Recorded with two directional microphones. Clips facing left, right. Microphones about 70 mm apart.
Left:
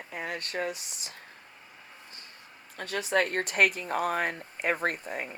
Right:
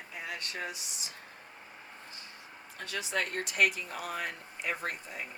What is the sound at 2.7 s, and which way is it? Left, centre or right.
Speech, left.